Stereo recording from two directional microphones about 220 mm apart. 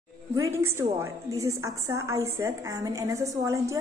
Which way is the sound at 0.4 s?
10° right (ahead or behind).